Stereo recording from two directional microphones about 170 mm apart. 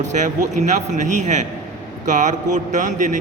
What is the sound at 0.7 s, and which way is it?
A man's voice, 45° right (ahead or behind).